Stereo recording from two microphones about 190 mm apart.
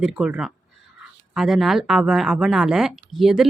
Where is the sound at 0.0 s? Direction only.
5° right (ahead or behind).